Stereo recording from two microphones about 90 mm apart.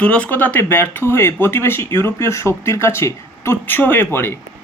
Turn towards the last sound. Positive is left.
turn(degrees=25)  # may be behind; listen again after turning